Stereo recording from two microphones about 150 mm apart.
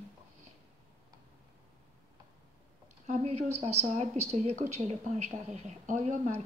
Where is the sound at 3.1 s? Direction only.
45° right (ahead or behind).